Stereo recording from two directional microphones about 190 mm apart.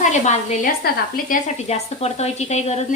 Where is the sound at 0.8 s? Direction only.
50° left (ahead or behind).